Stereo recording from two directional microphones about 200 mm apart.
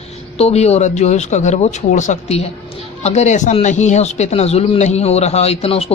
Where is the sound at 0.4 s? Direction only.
30° left (ahead or behind).